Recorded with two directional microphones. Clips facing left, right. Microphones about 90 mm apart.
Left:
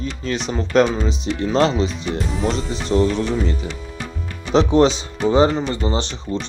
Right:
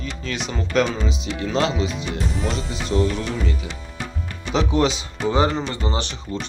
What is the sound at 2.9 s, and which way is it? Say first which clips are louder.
Speech: left 4 dB; 30° left (ahead or behind).